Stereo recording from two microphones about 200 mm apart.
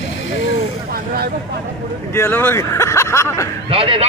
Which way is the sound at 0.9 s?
50° right (ahead or behind).